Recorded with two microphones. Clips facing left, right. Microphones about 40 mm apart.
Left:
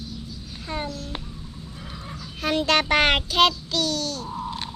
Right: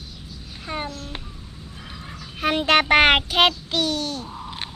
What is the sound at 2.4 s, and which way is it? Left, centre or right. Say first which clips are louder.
Child singing: right 3 dB; right.